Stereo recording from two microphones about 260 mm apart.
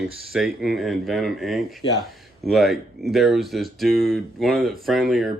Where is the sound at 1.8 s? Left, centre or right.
Centre.